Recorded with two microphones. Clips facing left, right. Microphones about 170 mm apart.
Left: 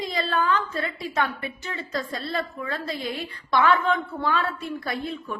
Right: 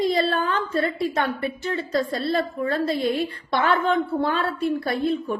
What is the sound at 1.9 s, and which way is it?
A woman's voice, 30° right (ahead or behind).